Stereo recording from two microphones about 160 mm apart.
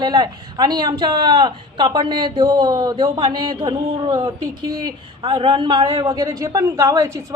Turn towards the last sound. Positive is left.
turn(degrees=-20)  # may be behind; listen again after turning